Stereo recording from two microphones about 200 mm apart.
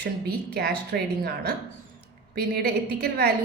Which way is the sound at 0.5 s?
55° right (ahead or behind).